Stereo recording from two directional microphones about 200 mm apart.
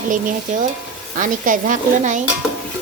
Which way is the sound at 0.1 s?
40° right (ahead or behind).